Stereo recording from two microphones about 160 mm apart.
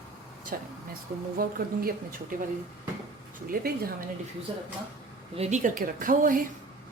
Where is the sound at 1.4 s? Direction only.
65° right (ahead or behind).